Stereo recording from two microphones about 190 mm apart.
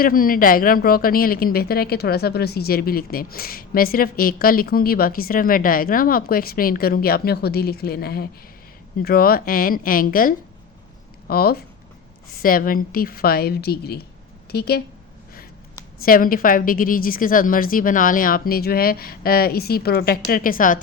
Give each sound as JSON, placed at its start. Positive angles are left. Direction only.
{"t": 0.0, "sound": "a woman's voice", "side_deg": 50}
{"t": 16.0, "sound": "a woman's voice", "side_deg": 50}